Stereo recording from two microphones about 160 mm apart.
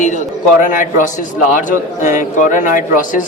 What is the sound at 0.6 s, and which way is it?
A man's voice, 55° left (ahead or behind).